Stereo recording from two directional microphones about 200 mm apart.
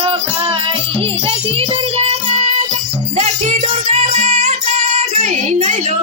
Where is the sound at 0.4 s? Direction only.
25° right (ahead or behind).